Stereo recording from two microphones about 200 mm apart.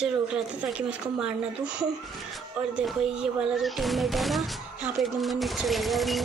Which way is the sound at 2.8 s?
5° right (ahead or behind).